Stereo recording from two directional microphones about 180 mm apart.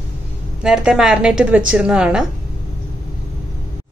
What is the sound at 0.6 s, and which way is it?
A woman's voice, 5° right (ahead or behind).